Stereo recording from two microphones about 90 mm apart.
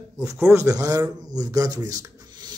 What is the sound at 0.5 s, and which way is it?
Speech, 30° right (ahead or behind).